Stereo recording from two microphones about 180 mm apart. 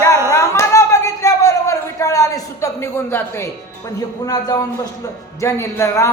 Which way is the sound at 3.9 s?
20° left (ahead or behind).